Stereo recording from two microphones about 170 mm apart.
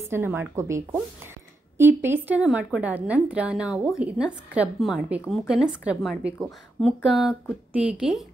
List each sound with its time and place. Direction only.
0.1 s a woman's voice: 15° right (ahead or behind)